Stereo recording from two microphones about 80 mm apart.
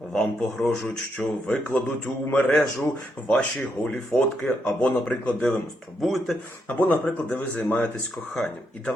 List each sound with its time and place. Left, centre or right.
0.1 s speech: centre
1.2 s speech: left; by 4.5 s centre
4.6 s speech: centre
6.7 s speech: left